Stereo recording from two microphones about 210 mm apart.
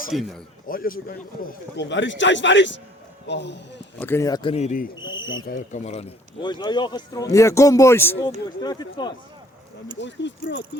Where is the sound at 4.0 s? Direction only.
10° left (ahead or behind).